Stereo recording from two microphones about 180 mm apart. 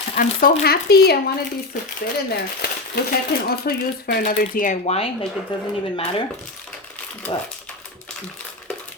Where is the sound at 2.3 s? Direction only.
60° left (ahead or behind).